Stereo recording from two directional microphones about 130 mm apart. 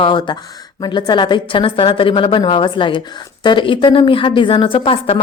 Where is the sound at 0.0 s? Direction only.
40° left (ahead or behind).